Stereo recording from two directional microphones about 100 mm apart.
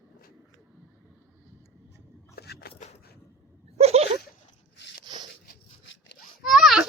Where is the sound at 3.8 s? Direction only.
90° right.